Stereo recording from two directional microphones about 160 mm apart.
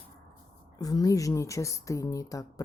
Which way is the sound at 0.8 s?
20° left (ahead or behind).